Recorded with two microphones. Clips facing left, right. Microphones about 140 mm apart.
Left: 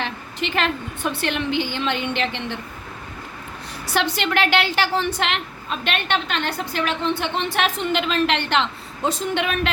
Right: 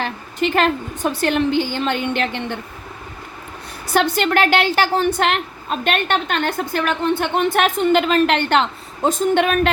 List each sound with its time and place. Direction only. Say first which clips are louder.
0.0 s a woman's voice: right 6 dB; 45° right (ahead or behind)
3.9 s a woman's voice: right 5 dB; 45° right (ahead or behind)